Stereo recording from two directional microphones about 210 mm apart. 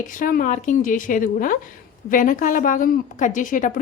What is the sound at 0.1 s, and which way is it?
A woman's voice, 40° left (ahead or behind).